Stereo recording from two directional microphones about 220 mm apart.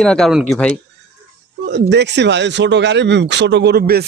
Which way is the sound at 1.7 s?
50° right (ahead or behind).